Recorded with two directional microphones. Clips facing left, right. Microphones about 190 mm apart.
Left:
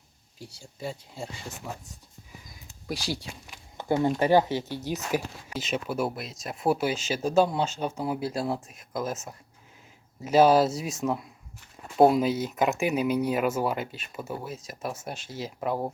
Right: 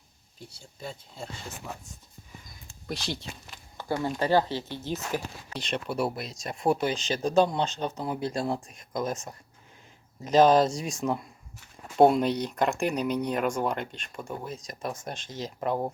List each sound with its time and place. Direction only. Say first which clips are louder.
0.3 s speech: left 3 dB; 10° left (ahead or behind)
2.6 s a sound: left 2 dB; 10° left (ahead or behind)
4.2 s speech: right 1 dB; 15° left (ahead or behind)